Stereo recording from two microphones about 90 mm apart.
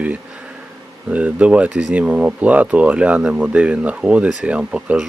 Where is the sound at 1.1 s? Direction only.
15° right (ahead or behind).